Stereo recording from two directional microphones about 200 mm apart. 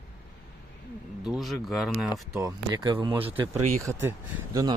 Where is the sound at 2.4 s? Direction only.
20° right (ahead or behind).